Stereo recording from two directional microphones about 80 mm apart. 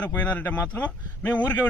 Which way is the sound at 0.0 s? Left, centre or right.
Centre.